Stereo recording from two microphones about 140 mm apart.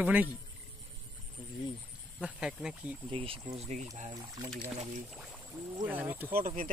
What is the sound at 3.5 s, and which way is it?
Speech, 50° right (ahead or behind).